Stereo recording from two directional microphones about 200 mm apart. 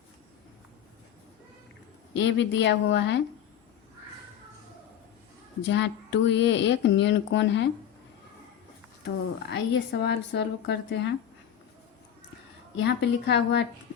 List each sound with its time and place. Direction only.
2.1 s speech: 65° left (ahead or behind)
5.6 s speech: 60° left (ahead or behind)
9.5 s speech: 60° left (ahead or behind)
12.7 s speech: 60° left (ahead or behind)